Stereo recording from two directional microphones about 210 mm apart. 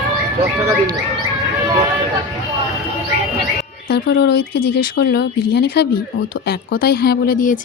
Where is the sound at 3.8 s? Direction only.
50° left (ahead or behind).